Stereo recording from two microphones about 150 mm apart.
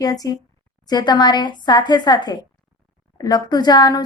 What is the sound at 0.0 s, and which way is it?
Speech, 25° left (ahead or behind).